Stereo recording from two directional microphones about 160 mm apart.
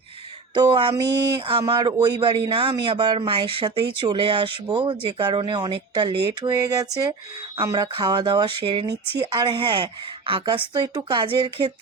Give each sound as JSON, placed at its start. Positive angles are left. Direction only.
{"t": 0.5, "sound": "speech", "side_deg": -30}